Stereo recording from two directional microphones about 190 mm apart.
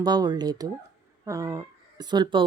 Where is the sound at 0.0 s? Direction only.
20° right (ahead or behind).